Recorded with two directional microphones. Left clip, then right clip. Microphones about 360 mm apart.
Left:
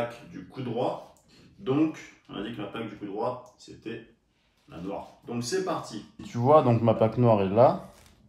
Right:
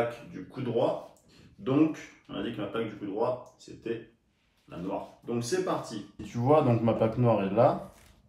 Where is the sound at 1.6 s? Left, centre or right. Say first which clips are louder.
Even; centre.